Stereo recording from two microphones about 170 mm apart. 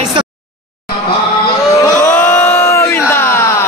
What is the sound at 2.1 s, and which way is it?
Crowd, 15° left (ahead or behind).